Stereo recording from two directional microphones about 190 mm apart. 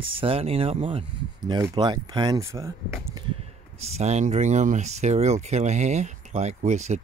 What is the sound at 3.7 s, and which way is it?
Speech, 35° right (ahead or behind).